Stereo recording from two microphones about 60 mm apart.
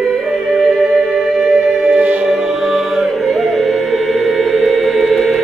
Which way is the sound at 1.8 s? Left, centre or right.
Right.